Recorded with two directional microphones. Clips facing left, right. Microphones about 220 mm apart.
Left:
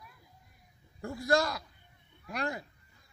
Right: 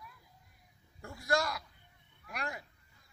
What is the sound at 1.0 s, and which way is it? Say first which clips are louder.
A man's voice: left 5 dB; 30° left (ahead or behind).